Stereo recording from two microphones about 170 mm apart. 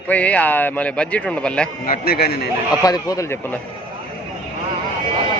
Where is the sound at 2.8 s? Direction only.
20° left (ahead or behind).